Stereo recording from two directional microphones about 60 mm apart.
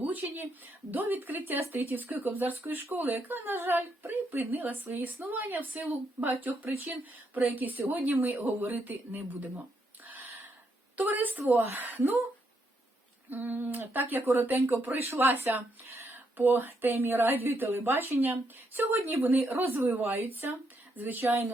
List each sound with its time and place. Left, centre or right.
0.0 s speech: right
7.3 s speech: right
10.9 s a woman's voice: right
13.3 s speech: right